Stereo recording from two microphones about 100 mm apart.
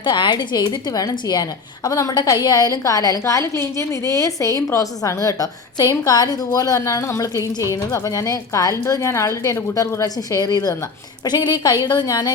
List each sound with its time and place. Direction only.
0.0 s a woman's voice: 50° left (ahead or behind)